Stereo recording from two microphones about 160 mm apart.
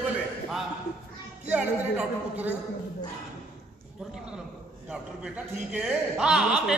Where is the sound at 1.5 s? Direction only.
10° right (ahead or behind).